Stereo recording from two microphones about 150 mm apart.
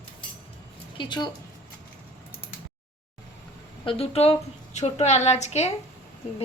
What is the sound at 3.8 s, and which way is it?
A woman's voice, 40° left (ahead or behind).